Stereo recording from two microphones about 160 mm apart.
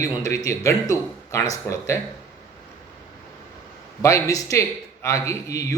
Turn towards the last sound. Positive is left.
turn(degrees=20)  # may be behind; listen again after turning